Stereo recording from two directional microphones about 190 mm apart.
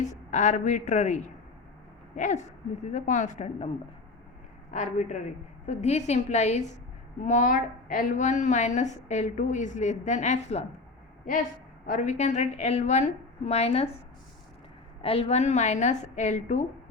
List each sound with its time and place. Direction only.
0.0 s a woman's voice: 40° left (ahead or behind)
4.7 s a woman's voice: 40° left (ahead or behind)
11.9 s a woman's voice: 40° left (ahead or behind)
15.0 s a woman's voice: 30° left (ahead or behind)